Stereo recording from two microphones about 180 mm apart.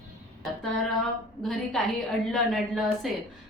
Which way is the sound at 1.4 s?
Centre (ahead or behind).